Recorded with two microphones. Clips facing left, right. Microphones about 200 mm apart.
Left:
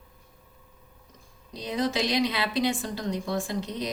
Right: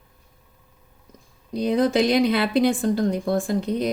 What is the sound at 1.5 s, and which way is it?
A woman's voice, 55° right (ahead or behind).